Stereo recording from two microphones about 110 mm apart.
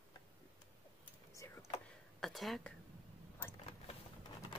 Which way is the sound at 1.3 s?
30° left (ahead or behind).